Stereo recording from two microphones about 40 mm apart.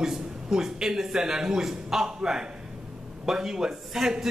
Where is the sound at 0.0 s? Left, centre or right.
Centre.